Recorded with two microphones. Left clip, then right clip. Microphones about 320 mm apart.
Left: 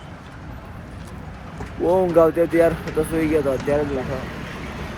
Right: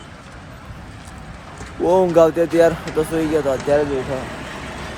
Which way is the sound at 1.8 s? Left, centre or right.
Centre.